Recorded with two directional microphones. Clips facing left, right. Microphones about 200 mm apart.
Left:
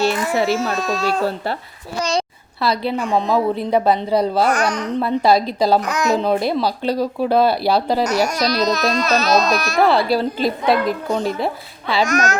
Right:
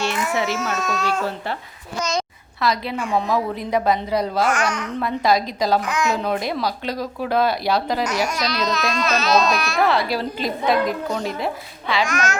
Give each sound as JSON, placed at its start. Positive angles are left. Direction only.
{"t": 0.0, "sound": "a child's voice", "side_deg": 35}